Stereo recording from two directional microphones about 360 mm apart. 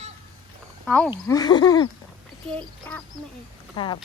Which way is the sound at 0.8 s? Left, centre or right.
Centre.